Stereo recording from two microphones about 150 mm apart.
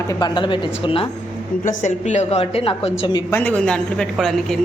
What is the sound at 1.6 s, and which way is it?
A woman's voice, 55° left (ahead or behind).